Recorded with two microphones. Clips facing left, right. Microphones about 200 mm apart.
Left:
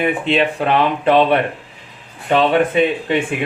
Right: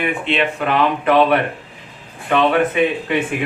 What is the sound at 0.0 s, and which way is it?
Speech, 35° left (ahead or behind).